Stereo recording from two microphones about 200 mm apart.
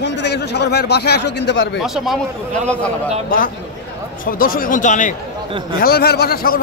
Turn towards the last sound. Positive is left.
turn(degrees=50)  # may be behind; listen again after turning